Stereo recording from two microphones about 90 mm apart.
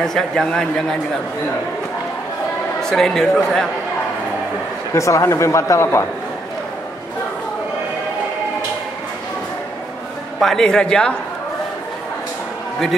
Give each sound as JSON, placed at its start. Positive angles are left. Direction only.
{"t": 0.0, "sound": "a man's voice", "side_deg": 5}
{"t": 2.8, "sound": "a man's voice", "side_deg": 5}
{"t": 4.9, "sound": "speech", "side_deg": 35}
{"t": 10.4, "sound": "a man's voice", "side_deg": 5}